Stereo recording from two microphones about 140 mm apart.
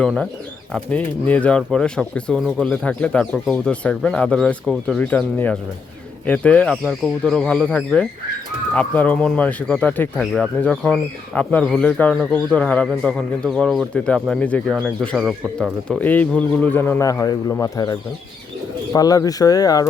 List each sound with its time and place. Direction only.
0.7 s speech: 10° left (ahead or behind); by 17.9 s 25° left (ahead or behind)
18.9 s speech: 25° left (ahead or behind)